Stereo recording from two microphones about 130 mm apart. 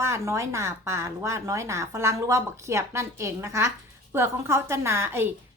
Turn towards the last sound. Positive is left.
turn(degrees=-20)  # may be behind; listen again after turning